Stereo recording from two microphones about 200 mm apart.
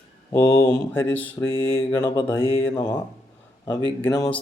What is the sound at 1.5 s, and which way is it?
Mantra, 75° left (ahead or behind).